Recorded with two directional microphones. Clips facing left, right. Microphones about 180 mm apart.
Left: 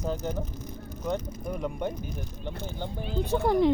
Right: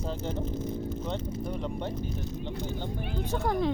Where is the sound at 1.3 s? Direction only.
30° right (ahead or behind).